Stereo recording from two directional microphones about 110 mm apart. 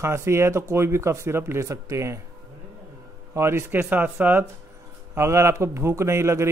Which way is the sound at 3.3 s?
25° right (ahead or behind).